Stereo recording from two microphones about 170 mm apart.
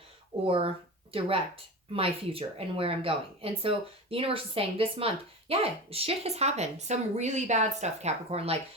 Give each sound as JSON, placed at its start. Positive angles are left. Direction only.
{"t": 0.4, "sound": "speech", "side_deg": -35}
{"t": 1.9, "sound": "speech", "side_deg": -35}